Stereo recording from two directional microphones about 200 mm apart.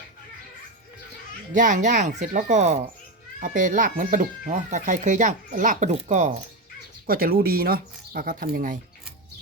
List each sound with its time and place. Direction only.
1.5 s speech: 40° right (ahead or behind)
7.1 s speech: 50° right (ahead or behind)